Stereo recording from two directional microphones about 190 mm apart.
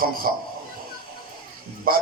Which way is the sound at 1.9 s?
50° right (ahead or behind).